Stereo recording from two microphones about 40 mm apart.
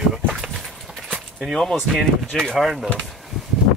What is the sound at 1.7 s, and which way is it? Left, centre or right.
Speech, centre.